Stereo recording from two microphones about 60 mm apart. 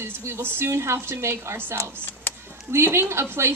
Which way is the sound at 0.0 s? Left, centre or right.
Right.